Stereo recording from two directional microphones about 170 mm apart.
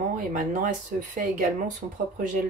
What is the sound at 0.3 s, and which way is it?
Speech, 50° right (ahead or behind).